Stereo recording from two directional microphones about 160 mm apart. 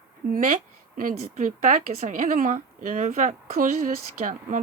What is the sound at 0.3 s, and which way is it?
A woman's voice, 55° right (ahead or behind).